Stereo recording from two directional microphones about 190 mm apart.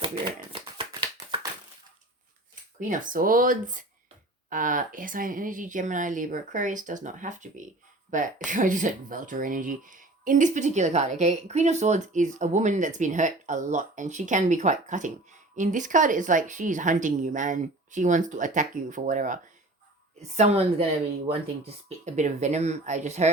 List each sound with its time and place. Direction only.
0.0 s shuffling cards: 25° right (ahead or behind)
2.9 s a woman's voice: 45° right (ahead or behind)
21.8 s speech: 40° right (ahead or behind)